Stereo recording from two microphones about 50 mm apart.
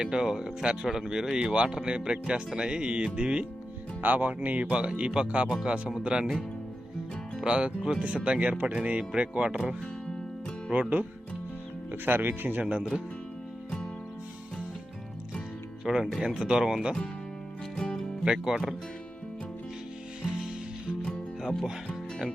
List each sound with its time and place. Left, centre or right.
0.0 s speech: centre
4.0 s speech: right; by 6.3 s centre
7.4 s speech: centre
10.8 s speech: right
12.6 s speech: right
15.8 s speech: centre
17.7 s music: centre
18.5 s speech: centre